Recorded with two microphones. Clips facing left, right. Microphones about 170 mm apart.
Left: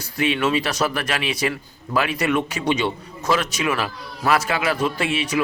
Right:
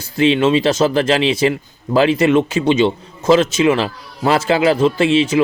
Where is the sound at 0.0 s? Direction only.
25° right (ahead or behind).